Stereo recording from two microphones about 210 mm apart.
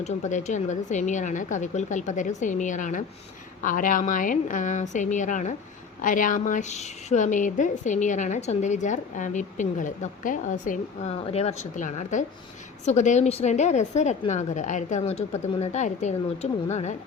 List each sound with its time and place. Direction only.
0.0 s a woman's voice: 35° left (ahead or behind)